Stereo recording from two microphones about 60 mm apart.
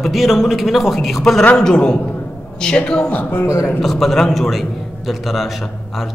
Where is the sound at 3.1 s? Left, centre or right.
Left.